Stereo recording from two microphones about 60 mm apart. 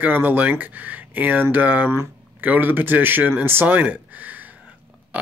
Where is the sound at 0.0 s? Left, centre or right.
Right.